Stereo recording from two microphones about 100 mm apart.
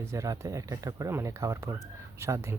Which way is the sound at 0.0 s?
30° right (ahead or behind).